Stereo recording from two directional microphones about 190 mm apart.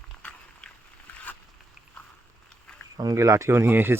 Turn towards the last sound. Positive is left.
turn(degrees=-10)  # may be behind; listen again after turning